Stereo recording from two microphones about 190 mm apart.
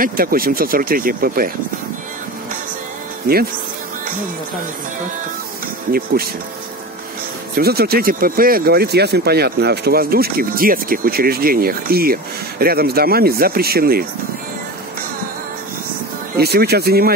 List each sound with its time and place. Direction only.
0.0 s speech: 50° right (ahead or behind)
3.3 s speech: 50° right (ahead or behind)
5.9 s speech: 50° right (ahead or behind)
7.5 s speech: 55° right (ahead or behind)
16.3 s speech: 55° right (ahead or behind)